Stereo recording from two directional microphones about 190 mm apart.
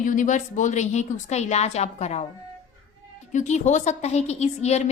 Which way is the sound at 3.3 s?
40° left (ahead or behind).